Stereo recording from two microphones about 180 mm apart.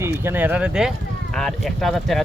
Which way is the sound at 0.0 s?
15° right (ahead or behind).